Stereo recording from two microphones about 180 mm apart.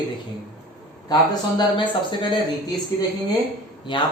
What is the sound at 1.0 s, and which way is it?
Speech, 25° left (ahead or behind).